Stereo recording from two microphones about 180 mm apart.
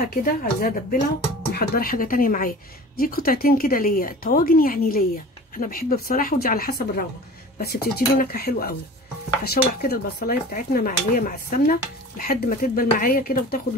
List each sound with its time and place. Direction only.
0.1 s speech: 55° left (ahead or behind)